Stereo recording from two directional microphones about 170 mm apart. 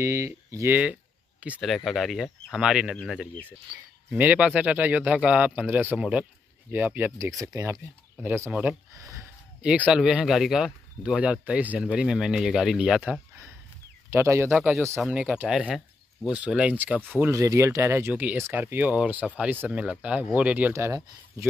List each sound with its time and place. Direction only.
0.0 s speech: 15° right (ahead or behind)
1.4 s speech: 5° right (ahead or behind)
4.1 s speech: 10° right (ahead or behind)
9.7 s speech: 5° right (ahead or behind)
14.5 s speech: centre (ahead or behind); by 21.5 s 15° right (ahead or behind)